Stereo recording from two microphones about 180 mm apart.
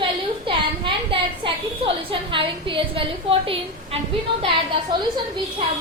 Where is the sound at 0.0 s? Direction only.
30° right (ahead or behind).